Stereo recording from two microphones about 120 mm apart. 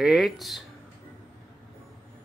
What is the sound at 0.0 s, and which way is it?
Speech, centre (ahead or behind).